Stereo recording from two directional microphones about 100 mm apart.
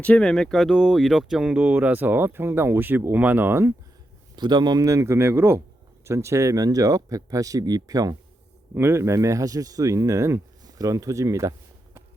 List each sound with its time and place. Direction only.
0.0 s speech: 10° left (ahead or behind); by 1.5 s 5° right (ahead or behind)
1.5 s speech: 15° right (ahead or behind)
4.4 s speech: 45° right (ahead or behind)
8.7 s speech: 25° right (ahead or behind)